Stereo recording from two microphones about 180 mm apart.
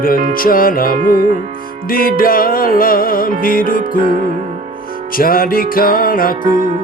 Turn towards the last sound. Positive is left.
turn(degrees=50)  # may be behind; listen again after turning